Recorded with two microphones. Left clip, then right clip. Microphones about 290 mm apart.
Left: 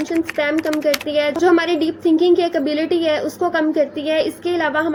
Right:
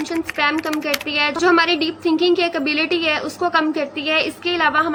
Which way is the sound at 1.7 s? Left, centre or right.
Right.